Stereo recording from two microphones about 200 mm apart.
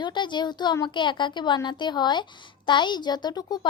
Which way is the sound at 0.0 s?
20° left (ahead or behind).